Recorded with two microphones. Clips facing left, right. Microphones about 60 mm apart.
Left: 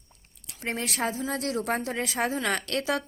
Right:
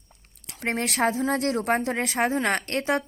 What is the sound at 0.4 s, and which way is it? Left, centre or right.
A woman's voice, right.